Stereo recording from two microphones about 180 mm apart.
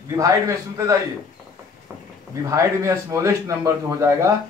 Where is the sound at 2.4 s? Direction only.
15° right (ahead or behind).